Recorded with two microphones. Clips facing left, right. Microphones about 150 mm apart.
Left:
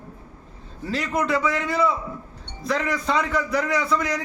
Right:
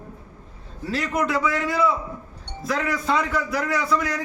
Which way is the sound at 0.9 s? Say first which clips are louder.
Even; centre (ahead or behind).